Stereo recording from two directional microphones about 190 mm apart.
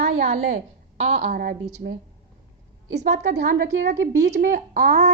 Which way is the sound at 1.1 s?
50° right (ahead or behind).